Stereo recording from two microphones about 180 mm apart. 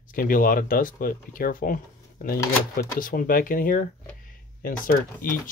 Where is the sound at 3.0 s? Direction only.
50° left (ahead or behind).